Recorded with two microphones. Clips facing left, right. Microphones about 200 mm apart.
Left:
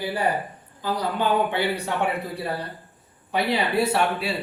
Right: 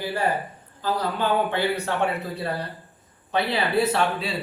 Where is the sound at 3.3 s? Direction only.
10° left (ahead or behind).